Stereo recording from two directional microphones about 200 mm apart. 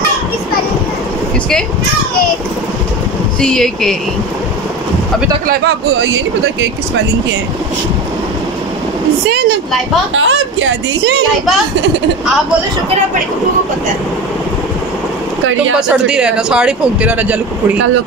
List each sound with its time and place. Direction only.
3.3 s speech: 5° left (ahead or behind)
10.1 s speech: 70° right (ahead or behind)
15.9 s speech: 5° right (ahead or behind)